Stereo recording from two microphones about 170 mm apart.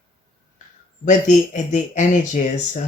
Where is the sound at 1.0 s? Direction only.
45° left (ahead or behind).